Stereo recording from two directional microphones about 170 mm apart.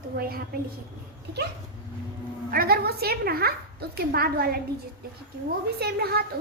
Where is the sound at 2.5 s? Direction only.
60° right (ahead or behind).